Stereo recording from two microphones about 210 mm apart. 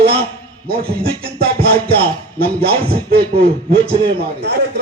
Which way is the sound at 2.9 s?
50° right (ahead or behind).